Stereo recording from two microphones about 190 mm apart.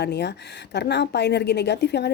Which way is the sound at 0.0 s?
60° left (ahead or behind).